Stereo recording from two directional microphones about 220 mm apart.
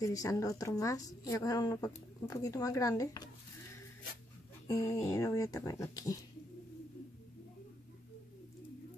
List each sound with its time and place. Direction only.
0.0 s a woman's voice: 15° left (ahead or behind)
4.6 s a woman's voice: 15° left (ahead or behind)